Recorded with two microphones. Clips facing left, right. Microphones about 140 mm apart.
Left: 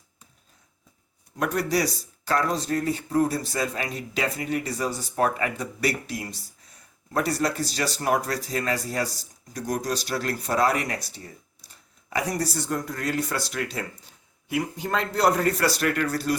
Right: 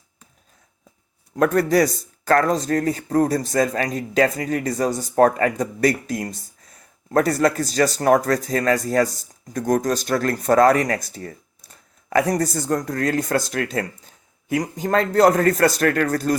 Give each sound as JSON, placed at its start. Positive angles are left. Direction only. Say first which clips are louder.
{"t": 1.4, "sound": "speech", "louder": "right 8 dB", "side_deg": -50}